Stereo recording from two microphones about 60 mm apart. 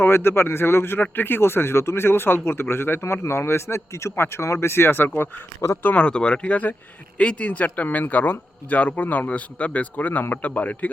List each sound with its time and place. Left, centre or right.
0.0 s a man's voice: left
5.8 s speech: left